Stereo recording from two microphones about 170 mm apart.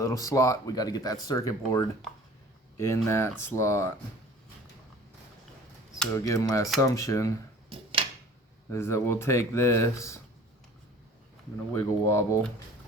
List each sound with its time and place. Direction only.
0.0 s speech: 20° left (ahead or behind)
6.1 s speech: 20° left (ahead or behind)
7.7 s a sound: 30° right (ahead or behind)
8.7 s speech: 15° left (ahead or behind)
11.7 s speech: 15° left (ahead or behind)